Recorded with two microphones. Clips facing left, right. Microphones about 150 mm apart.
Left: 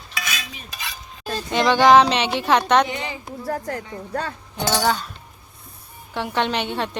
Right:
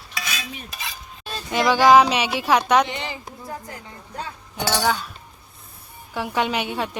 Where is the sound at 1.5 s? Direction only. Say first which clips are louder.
Left 1 dB; 5° right (ahead or behind).